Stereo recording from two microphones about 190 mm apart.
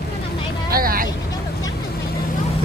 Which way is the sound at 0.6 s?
50° right (ahead or behind).